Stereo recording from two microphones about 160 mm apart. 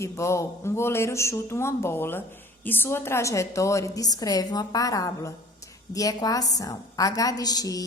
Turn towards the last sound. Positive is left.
turn(degrees=25)  # may be behind; listen again after turning